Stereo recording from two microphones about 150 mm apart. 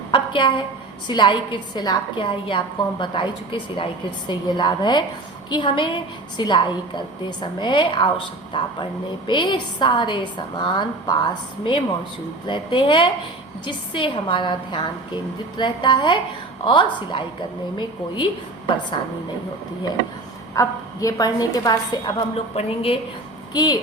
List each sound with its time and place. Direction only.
0.1 s a sound: 35° left (ahead or behind)
1.0 s a woman's voice: 30° left (ahead or behind)
20.5 s a woman's voice: 20° left (ahead or behind)
22.5 s a woman's voice: 40° left (ahead or behind)